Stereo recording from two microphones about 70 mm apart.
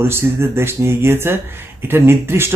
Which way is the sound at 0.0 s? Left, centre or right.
Right.